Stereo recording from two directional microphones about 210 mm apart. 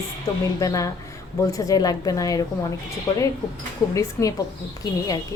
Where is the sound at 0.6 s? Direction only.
15° left (ahead or behind).